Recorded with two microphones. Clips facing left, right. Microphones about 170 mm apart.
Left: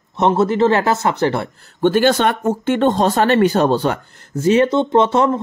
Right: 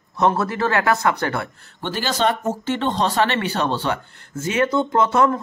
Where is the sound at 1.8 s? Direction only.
55° left (ahead or behind).